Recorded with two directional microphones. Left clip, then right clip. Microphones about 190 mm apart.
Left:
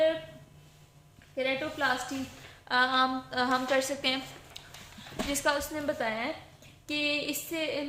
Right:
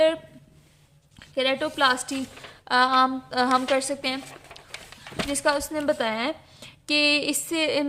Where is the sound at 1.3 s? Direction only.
45° right (ahead or behind).